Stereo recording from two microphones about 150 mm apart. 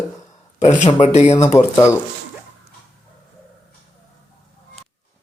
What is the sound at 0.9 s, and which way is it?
Speech, 45° left (ahead or behind).